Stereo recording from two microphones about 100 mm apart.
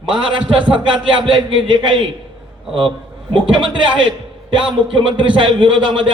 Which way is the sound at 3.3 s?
55° right (ahead or behind).